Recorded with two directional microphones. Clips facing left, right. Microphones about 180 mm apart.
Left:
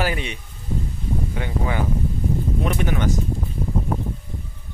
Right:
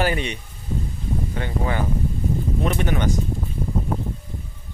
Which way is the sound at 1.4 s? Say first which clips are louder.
Right 1 dB; 10° left (ahead or behind).